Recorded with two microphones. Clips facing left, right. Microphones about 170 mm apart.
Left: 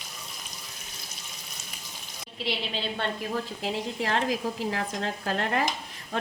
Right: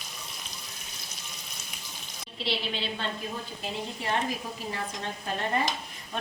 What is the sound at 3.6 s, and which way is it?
A woman's voice, 90° left.